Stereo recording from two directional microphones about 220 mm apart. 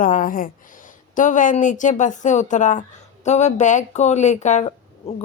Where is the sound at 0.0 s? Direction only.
40° left (ahead or behind).